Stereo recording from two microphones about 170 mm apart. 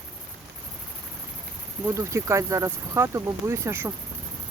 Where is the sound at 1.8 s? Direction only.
15° right (ahead or behind).